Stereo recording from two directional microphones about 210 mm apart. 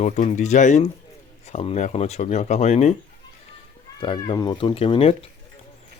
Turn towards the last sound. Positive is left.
turn(degrees=30)  # may be behind; listen again after turning